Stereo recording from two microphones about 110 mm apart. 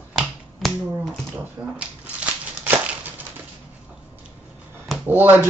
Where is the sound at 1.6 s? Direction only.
35° right (ahead or behind).